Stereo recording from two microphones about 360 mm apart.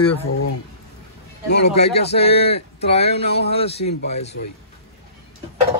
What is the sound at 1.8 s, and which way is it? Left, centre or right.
Speech, centre.